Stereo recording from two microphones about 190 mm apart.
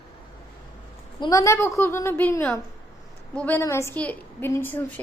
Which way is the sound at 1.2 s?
15° left (ahead or behind).